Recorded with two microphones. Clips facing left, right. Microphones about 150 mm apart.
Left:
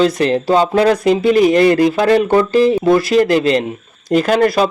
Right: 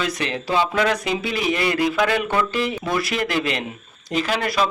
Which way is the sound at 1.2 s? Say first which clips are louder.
Left 15 dB; 45° left (ahead or behind).